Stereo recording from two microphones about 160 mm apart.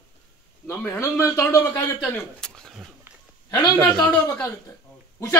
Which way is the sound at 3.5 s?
20° left (ahead or behind).